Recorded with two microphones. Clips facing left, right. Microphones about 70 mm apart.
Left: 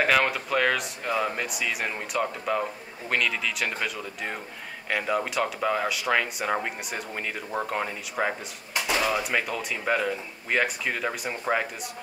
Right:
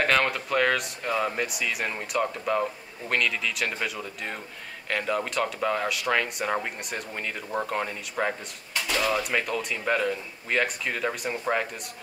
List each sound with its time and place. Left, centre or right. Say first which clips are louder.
0.0 s speech: left 1 dB; centre